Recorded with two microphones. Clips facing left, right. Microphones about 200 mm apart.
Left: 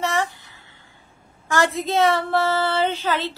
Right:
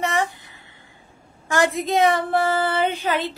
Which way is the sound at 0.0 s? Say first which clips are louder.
Right 1 dB; 15° right (ahead or behind).